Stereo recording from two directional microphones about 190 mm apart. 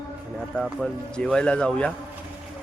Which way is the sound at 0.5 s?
Centre (ahead or behind).